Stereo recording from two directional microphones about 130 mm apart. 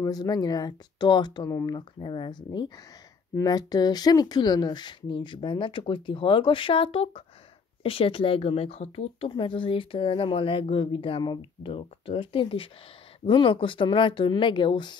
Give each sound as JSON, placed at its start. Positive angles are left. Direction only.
{"t": 0.0, "sound": "speech", "side_deg": 30}